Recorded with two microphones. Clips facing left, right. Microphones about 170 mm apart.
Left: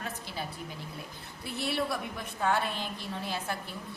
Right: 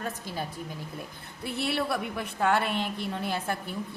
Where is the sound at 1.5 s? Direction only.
65° right (ahead or behind).